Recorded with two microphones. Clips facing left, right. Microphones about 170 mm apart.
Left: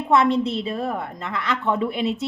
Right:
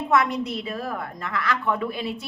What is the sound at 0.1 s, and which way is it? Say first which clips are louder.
A woman's voice: left 5 dB; 25° left (ahead or behind).